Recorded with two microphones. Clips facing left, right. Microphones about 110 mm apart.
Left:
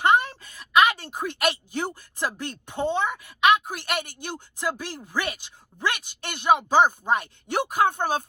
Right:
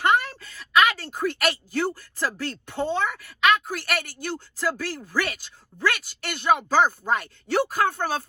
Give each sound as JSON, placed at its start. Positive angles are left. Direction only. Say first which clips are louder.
{"t": 0.0, "sound": "a woman's voice", "louder": "left 1 dB", "side_deg": 20}